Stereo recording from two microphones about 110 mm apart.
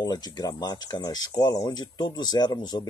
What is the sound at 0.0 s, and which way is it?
Speech, 40° left (ahead or behind).